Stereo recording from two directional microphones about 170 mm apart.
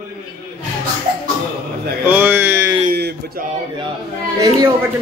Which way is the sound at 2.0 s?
10° right (ahead or behind).